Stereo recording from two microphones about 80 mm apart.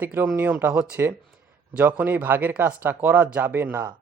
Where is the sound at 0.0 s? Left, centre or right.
Right.